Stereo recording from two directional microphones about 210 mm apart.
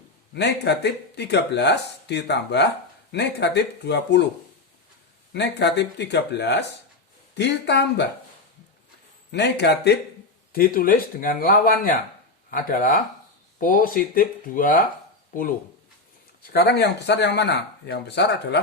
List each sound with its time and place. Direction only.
0.3 s speech: 55° left (ahead or behind)
5.3 s speech: 55° left (ahead or behind)
9.3 s speech: 55° left (ahead or behind)
16.5 s speech: 50° left (ahead or behind)